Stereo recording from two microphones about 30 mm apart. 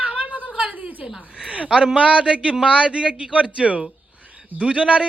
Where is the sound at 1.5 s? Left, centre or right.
Right.